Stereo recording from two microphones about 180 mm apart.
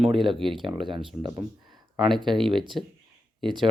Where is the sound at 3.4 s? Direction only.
25° right (ahead or behind).